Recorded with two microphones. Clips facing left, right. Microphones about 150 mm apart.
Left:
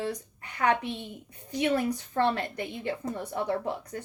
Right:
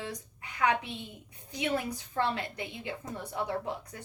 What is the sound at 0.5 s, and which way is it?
Speech, 55° left (ahead or behind).